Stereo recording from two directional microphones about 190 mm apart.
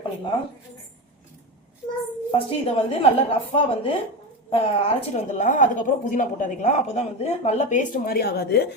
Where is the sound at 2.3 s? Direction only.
30° left (ahead or behind).